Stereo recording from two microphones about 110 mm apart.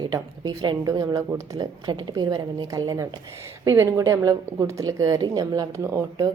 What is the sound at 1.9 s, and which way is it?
A woman's voice, 45° right (ahead or behind).